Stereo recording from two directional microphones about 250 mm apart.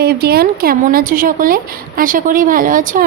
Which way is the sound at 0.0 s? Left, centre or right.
Right.